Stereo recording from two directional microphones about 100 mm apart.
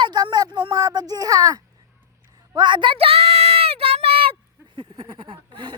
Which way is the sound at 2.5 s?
50° right (ahead or behind).